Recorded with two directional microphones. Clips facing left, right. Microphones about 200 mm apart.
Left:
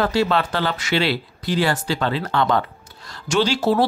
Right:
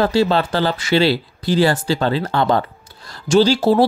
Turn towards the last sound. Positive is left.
turn(degrees=-30)  # may be behind; listen again after turning